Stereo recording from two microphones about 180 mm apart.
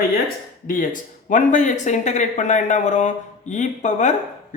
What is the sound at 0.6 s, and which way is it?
Speech, 50° left (ahead or behind).